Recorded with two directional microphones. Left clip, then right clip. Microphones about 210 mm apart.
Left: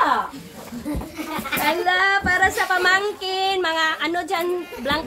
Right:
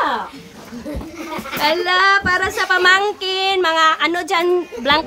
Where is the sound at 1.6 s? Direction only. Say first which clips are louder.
Right 5 dB; 25° right (ahead or behind).